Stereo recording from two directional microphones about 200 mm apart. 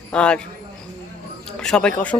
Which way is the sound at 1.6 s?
5° left (ahead or behind).